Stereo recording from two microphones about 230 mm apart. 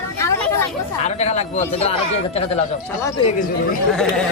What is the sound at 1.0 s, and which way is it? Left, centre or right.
Speech, left.